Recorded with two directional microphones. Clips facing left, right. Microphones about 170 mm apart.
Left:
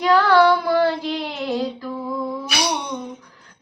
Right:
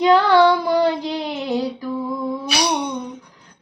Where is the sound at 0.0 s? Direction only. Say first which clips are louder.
Right 2 dB; 20° right (ahead or behind).